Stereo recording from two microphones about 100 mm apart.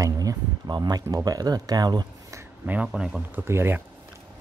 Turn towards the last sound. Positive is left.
turn(degrees=-25)  # may be behind; listen again after turning